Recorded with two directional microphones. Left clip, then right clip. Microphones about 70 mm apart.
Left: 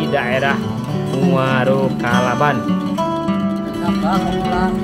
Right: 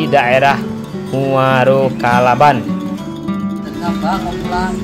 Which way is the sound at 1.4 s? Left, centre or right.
Right.